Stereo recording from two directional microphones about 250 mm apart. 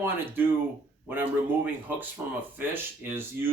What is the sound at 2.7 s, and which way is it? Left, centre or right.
Speech, centre.